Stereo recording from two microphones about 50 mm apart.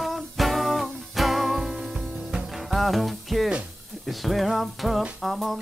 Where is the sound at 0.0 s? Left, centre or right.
Centre.